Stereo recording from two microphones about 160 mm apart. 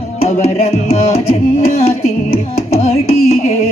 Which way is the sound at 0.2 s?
40° left (ahead or behind).